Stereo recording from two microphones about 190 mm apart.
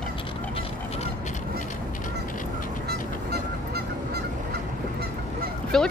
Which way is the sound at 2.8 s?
55° right (ahead or behind).